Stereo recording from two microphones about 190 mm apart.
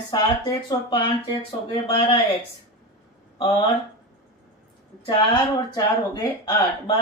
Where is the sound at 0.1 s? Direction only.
25° left (ahead or behind).